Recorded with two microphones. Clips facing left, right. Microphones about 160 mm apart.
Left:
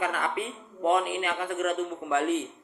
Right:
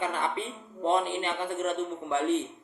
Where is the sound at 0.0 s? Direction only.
30° right (ahead or behind).